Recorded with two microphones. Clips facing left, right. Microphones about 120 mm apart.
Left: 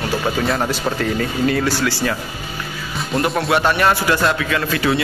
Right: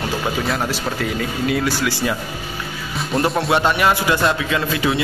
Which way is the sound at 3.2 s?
20° right (ahead or behind).